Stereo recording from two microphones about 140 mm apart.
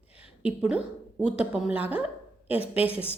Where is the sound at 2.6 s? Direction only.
45° left (ahead or behind).